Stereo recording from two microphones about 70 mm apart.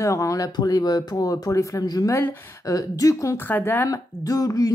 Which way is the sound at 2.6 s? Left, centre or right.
Left.